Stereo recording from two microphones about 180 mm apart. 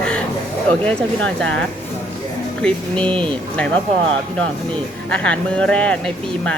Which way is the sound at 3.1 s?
30° right (ahead or behind).